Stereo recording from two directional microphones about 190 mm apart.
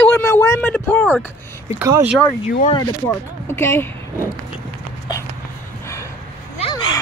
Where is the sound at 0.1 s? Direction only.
15° left (ahead or behind).